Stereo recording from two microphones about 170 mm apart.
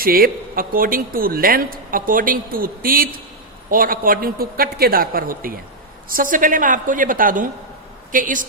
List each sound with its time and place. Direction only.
0.0 s a woman's voice: 60° right (ahead or behind)